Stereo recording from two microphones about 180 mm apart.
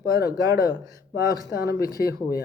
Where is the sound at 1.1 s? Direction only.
15° right (ahead or behind).